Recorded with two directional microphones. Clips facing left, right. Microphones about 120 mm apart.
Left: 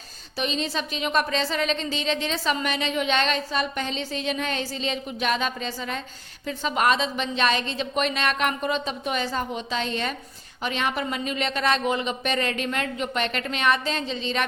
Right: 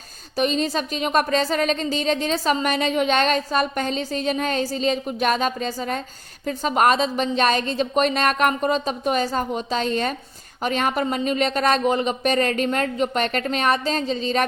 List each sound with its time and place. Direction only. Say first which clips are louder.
0.3 s speech: right 6 dB; 45° right (ahead or behind)